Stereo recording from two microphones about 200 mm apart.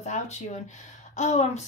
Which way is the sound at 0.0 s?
35° left (ahead or behind).